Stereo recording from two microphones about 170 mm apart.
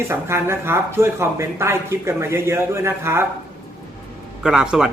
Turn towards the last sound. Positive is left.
turn(degrees=-5)  # may be behind; listen again after turning